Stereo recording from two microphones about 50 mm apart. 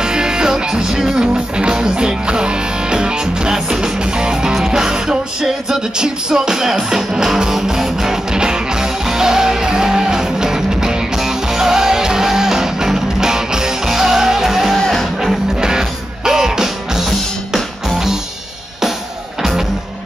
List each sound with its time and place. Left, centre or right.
0.0 s music: centre
14.8 s music: centre
15.6 s music: centre